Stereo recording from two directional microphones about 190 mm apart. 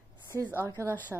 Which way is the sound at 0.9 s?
10° left (ahead or behind).